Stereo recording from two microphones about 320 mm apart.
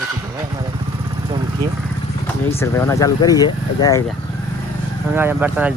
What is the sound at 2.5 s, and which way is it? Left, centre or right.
Speech, centre.